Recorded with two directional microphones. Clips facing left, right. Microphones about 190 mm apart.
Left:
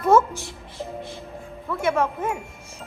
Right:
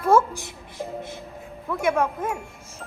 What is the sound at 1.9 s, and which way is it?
Speech, centre (ahead or behind).